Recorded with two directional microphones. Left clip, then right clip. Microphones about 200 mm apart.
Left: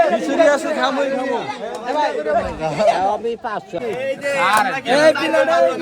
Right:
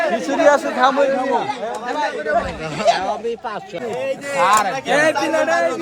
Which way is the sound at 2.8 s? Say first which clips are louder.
Even; 35° left (ahead or behind).